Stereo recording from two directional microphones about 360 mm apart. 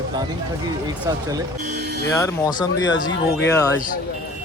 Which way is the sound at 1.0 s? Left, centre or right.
Centre.